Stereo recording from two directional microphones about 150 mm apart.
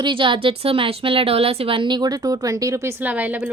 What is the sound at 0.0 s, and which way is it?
A woman's voice, 35° right (ahead or behind).